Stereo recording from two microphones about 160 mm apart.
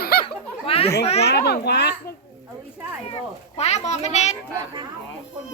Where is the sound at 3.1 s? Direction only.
40° left (ahead or behind).